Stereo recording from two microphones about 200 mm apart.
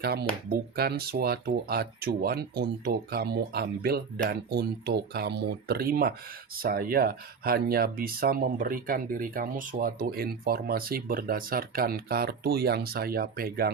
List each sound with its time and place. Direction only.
0.0 s speech: 50° right (ahead or behind)